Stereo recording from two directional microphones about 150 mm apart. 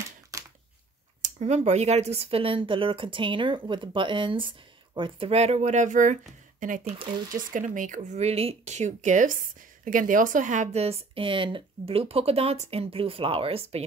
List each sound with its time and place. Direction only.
1.2 s speech: 50° right (ahead or behind)
6.9 s speech: 35° right (ahead or behind)
7.5 s speech: 60° right (ahead or behind); by 13.8 s 40° right (ahead or behind)